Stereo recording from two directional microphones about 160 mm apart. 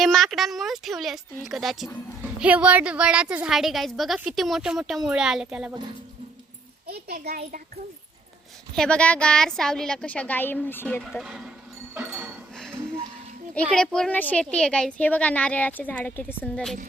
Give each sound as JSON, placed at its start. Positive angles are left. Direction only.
{"t": 0.0, "sound": "a woman's voice", "side_deg": 0}
{"t": 6.8, "sound": "a child's voice", "side_deg": -40}
{"t": 8.7, "sound": "a woman's voice", "side_deg": 5}
{"t": 11.1, "sound": "a woman's voice", "side_deg": 0}
{"t": 13.7, "sound": "a woman's voice", "side_deg": 5}